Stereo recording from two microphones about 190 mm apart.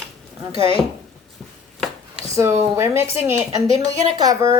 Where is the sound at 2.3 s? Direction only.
15° right (ahead or behind).